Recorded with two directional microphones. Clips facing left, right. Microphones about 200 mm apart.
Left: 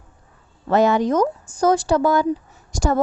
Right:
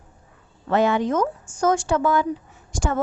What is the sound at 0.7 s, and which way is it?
A woman's voice, 40° left (ahead or behind).